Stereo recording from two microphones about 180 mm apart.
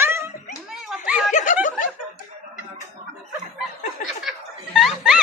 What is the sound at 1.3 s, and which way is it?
Snicker, 45° left (ahead or behind).